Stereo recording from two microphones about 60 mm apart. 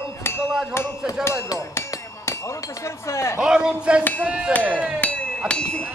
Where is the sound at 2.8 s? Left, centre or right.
Left.